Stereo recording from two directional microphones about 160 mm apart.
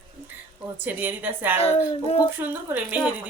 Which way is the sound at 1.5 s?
35° left (ahead or behind).